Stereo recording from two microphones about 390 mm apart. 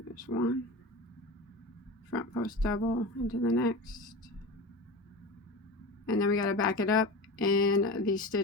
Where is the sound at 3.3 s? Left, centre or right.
Left.